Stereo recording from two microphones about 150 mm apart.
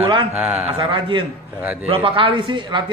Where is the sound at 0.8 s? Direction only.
35° right (ahead or behind).